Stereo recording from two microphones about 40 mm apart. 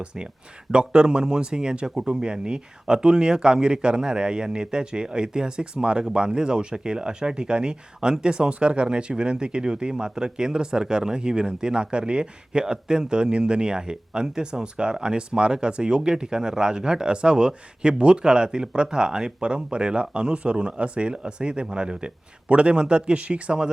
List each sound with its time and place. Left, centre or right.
0.0 s speech: right